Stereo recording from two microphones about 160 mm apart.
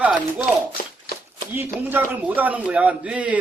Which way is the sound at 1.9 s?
10° right (ahead or behind).